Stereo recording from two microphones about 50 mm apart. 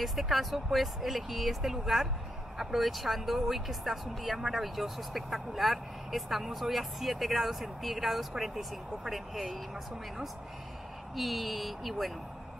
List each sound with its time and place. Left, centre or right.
0.0 s speech: centre
11.1 s speech: centre